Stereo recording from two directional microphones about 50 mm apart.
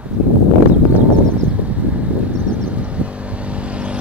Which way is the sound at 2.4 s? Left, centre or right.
Right.